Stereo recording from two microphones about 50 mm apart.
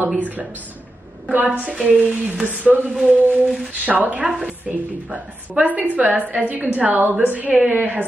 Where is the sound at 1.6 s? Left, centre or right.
Right.